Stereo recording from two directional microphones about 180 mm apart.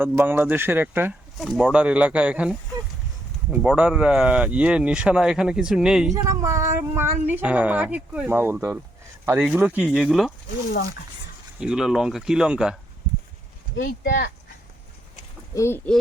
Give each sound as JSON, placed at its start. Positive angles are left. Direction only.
{"t": 0.0, "sound": "speech", "side_deg": -10}
{"t": 1.4, "sound": "speech", "side_deg": 0}
{"t": 3.6, "sound": "speech", "side_deg": -5}
{"t": 6.2, "sound": "speech", "side_deg": -15}
{"t": 11.6, "sound": "speech", "side_deg": -5}
{"t": 13.7, "sound": "speech", "side_deg": 55}
{"t": 15.5, "sound": "speech", "side_deg": 15}